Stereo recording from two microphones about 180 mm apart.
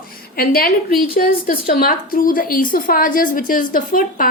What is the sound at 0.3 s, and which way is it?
A woman's voice, 55° left (ahead or behind).